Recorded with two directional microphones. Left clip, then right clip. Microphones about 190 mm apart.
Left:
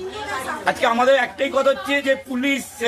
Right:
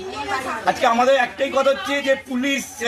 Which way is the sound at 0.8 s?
25° left (ahead or behind).